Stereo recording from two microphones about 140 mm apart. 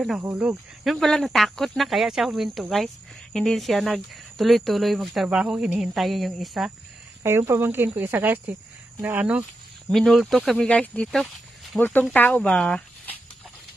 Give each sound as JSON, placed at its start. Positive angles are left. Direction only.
{"t": 0.4, "sound": "speech", "side_deg": -5}
{"t": 7.2, "sound": "speech", "side_deg": -20}
{"t": 9.8, "sound": "speech", "side_deg": 0}